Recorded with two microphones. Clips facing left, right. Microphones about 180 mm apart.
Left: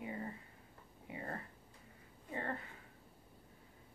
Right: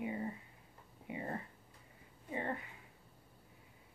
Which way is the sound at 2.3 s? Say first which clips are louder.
Right 2 dB; 15° right (ahead or behind).